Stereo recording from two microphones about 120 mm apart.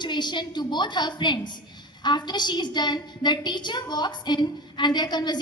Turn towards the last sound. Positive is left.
turn(degrees=35)  # may be behind; listen again after turning